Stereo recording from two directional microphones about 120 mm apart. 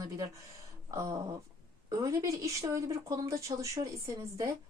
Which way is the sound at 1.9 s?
30° right (ahead or behind).